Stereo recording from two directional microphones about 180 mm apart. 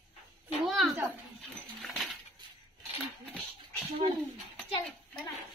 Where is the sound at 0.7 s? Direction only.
Centre (ahead or behind).